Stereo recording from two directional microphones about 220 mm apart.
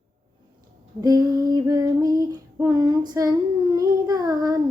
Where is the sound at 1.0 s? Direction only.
15° right (ahead or behind).